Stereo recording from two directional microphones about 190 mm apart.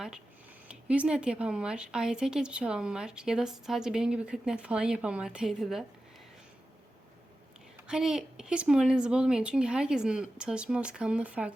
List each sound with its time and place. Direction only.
0.7 s a woman's voice: 5° right (ahead or behind)
7.9 s a woman's voice: 5° right (ahead or behind)